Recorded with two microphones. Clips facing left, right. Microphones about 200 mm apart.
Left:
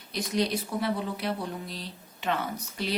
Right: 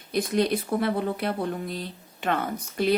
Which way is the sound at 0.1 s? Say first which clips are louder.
Right 5 dB; 55° right (ahead or behind).